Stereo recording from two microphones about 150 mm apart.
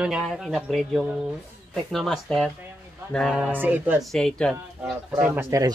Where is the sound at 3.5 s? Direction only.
10° right (ahead or behind).